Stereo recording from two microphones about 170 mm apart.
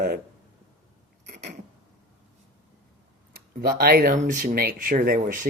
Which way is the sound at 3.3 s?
60° right (ahead or behind).